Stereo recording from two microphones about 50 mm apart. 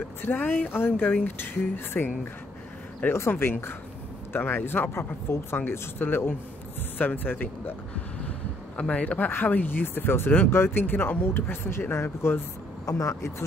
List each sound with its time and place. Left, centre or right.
0.2 s speech: left
8.7 s speech: left
9.3 s speech: left
11.9 s speech: left
12.8 s speech: left